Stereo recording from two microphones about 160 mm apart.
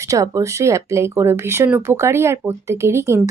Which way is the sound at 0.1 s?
20° right (ahead or behind).